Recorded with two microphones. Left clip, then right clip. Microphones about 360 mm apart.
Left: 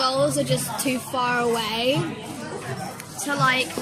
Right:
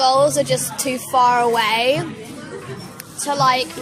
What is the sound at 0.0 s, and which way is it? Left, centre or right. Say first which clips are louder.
Music: right 7 dB; centre.